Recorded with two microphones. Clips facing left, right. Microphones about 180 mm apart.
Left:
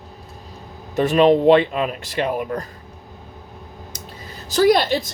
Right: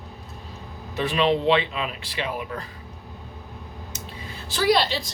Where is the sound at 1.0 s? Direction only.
45° left (ahead or behind).